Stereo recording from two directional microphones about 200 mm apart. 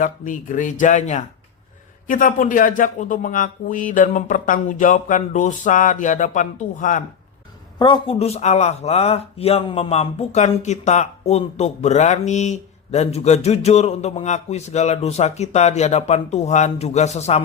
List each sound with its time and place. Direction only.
0.0 s speech: 40° left (ahead or behind)
7.8 s speech: 25° left (ahead or behind)